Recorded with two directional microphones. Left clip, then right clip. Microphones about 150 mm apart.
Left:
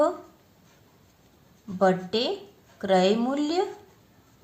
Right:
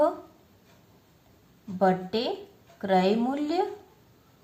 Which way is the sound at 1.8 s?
40° left (ahead or behind).